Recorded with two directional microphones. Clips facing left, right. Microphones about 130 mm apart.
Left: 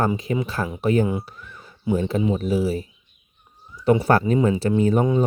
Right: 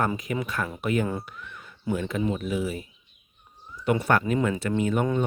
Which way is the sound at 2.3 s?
35° left (ahead or behind).